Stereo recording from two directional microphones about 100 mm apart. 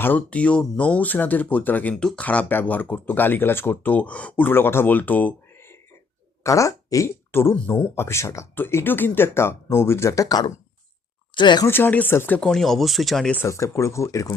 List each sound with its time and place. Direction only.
0.0 s speech: 15° left (ahead or behind)
6.4 s speech: 30° left (ahead or behind)
11.3 s speech: 50° left (ahead or behind)
11.6 s speech: 20° left (ahead or behind)
12.4 s speech: 5° left (ahead or behind)
13.3 s speech: 25° left (ahead or behind)